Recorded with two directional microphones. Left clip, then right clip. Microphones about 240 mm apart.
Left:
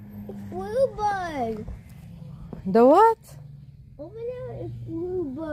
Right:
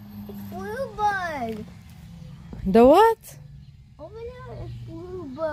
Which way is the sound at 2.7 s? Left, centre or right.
Centre.